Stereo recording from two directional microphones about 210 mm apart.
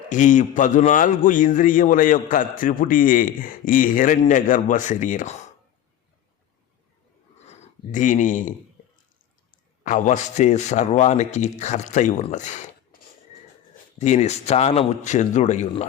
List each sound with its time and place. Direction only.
0.1 s a man's voice: 35° left (ahead or behind)
7.4 s speech: 35° left (ahead or behind)
9.8 s a man's voice: 35° left (ahead or behind)
14.0 s a man's voice: 35° left (ahead or behind)